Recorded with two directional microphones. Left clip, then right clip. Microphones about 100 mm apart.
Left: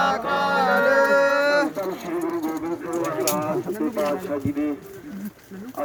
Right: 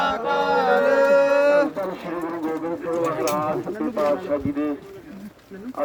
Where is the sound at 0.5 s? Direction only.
20° left (ahead or behind).